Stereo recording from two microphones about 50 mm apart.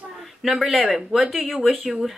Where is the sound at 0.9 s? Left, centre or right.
Centre.